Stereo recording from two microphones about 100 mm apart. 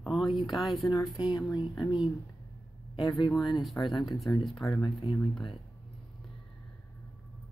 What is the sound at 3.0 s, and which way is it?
Speech, 50° left (ahead or behind).